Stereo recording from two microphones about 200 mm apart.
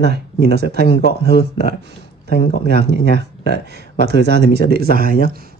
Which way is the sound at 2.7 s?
55° right (ahead or behind).